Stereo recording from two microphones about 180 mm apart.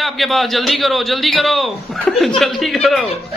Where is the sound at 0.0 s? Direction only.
Centre (ahead or behind).